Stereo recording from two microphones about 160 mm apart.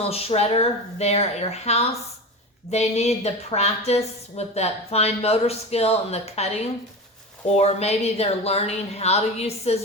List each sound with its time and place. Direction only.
0.1 s a woman's voice: 40° left (ahead or behind)